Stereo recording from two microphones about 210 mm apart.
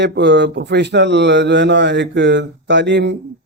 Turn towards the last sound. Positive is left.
turn(degrees=-55)  # may be behind; listen again after turning